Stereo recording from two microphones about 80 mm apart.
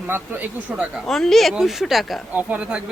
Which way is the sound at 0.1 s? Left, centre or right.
Right.